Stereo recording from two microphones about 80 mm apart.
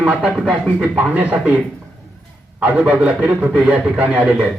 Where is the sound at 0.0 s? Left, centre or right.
Centre.